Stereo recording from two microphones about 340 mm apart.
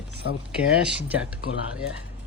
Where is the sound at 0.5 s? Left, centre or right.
Centre.